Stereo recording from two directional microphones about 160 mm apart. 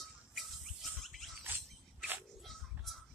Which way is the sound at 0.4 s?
Centre (ahead or behind).